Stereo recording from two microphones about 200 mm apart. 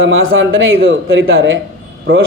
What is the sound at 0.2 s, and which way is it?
A man's voice, 80° right.